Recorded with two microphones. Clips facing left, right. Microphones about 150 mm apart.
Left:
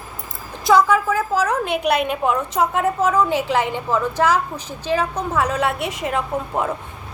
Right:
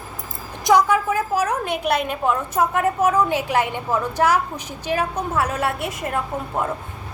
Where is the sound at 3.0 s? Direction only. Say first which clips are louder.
Left 1 dB; 10° right (ahead or behind).